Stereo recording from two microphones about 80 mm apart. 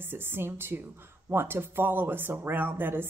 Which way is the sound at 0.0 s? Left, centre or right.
Right.